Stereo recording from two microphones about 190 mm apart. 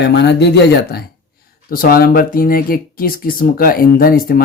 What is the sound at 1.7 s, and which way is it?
Speech, 50° left (ahead or behind).